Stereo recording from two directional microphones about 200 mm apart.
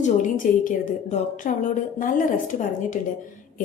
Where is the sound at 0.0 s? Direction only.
40° left (ahead or behind).